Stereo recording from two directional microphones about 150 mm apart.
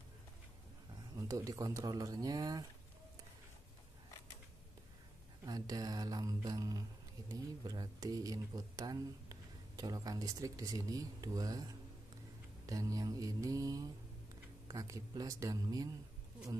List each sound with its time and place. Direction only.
1.1 s speech: 25° right (ahead or behind)
5.4 s speech: 25° right (ahead or behind)